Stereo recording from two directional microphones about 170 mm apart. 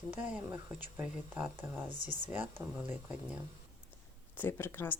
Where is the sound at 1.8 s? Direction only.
30° right (ahead or behind).